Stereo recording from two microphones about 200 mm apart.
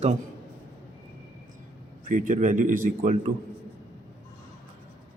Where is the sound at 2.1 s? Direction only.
40° right (ahead or behind).